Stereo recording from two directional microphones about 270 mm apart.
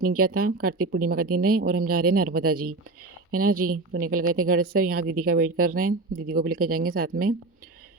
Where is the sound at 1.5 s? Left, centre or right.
Right.